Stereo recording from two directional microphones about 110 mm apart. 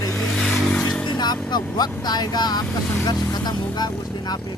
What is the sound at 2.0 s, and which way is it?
Speech, 35° left (ahead or behind).